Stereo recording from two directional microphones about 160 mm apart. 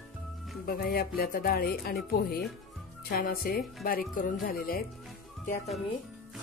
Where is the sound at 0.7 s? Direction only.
65° left (ahead or behind).